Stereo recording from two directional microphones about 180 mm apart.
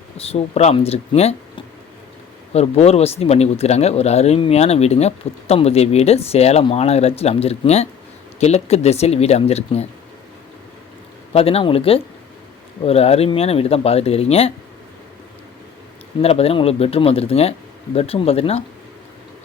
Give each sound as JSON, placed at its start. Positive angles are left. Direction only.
{"t": 0.2, "sound": "speech", "side_deg": 35}
{"t": 11.3, "sound": "speech", "side_deg": 35}
{"t": 16.2, "sound": "speech", "side_deg": 35}